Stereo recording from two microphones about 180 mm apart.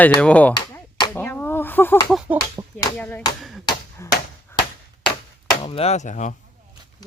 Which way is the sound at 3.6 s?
20° left (ahead or behind).